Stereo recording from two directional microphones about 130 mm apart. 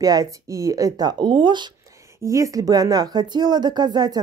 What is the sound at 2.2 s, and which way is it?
Speech, 25° right (ahead or behind).